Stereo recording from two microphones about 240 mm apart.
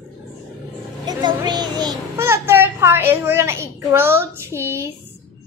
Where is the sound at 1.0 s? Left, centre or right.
Centre.